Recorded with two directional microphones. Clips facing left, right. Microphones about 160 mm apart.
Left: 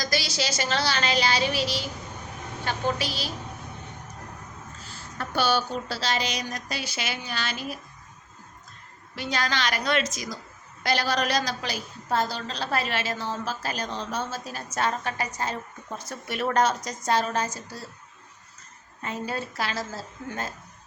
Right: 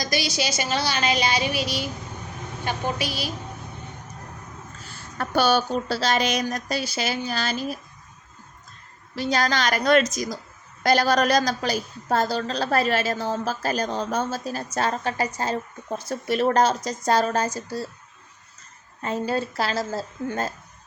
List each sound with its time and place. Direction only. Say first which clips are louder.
0.0 s a woman's voice: right 3 dB; 15° right (ahead or behind)
5.1 s a woman's voice: right 4 dB; 50° right (ahead or behind)
9.1 s a woman's voice: right 5 dB; 40° right (ahead or behind)
19.0 s a woman's voice: right 6 dB; 35° right (ahead or behind)